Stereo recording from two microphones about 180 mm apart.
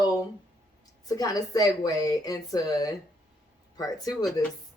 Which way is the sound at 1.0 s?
20° left (ahead or behind).